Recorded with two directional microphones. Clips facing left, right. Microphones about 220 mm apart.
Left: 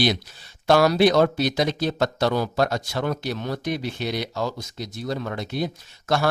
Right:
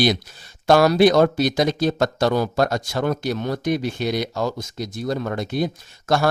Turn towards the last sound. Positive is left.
turn(degrees=-45)  # may be behind; listen again after turning